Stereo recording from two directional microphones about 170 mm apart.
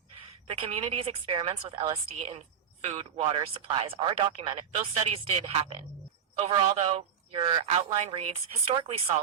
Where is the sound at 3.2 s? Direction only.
30° right (ahead or behind).